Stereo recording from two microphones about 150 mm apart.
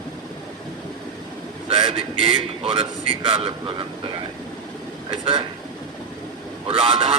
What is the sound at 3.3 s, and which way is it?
Speech, 35° right (ahead or behind).